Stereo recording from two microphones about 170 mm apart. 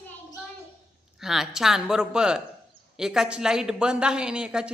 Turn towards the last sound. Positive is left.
turn(degrees=-5)  # may be behind; listen again after turning